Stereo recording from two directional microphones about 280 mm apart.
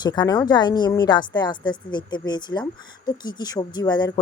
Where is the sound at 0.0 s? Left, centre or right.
Centre.